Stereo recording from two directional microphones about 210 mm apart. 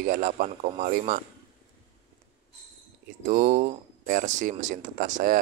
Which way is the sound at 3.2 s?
35° right (ahead or behind).